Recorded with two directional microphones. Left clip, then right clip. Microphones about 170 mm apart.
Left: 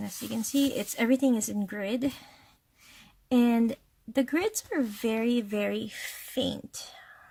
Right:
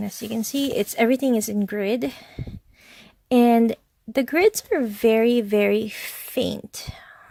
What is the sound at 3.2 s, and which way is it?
Speech, 45° right (ahead or behind).